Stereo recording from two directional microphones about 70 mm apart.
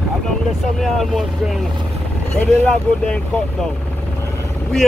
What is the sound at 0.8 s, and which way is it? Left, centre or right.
Speech, centre.